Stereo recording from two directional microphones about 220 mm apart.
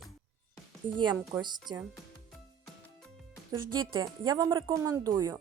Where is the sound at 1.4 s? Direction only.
20° right (ahead or behind).